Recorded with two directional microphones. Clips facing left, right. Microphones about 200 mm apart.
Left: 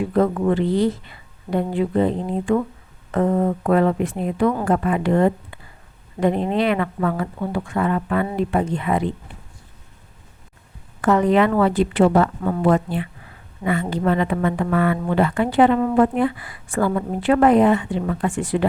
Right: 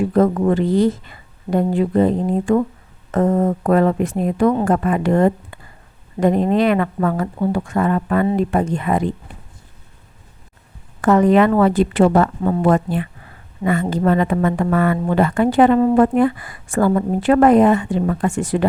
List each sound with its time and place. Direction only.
0.1 s a woman's voice: 40° right (ahead or behind)
11.0 s a woman's voice: 45° right (ahead or behind)